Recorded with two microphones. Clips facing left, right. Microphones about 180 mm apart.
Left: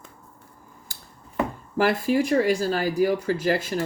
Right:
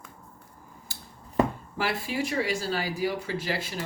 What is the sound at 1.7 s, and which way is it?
Speech, 50° left (ahead or behind).